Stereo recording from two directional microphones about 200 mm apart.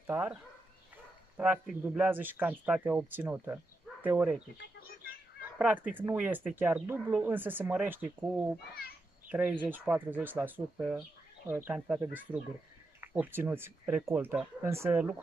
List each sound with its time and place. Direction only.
0.0 s speech: 10° right (ahead or behind)
4.7 s a sound: 50° left (ahead or behind)
5.4 s speech: 10° right (ahead or behind)
9.3 s speech: 5° right (ahead or behind)